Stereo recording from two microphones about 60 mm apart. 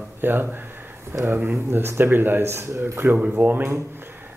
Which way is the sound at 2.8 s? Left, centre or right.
Right.